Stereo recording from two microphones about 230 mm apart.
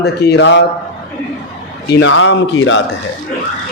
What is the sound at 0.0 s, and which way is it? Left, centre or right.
Speech, left.